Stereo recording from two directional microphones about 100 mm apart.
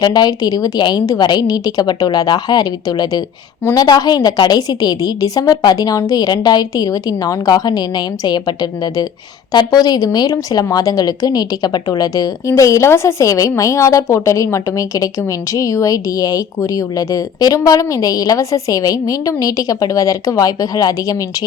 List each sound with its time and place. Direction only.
0.0 s a woman's voice: 45° left (ahead or behind)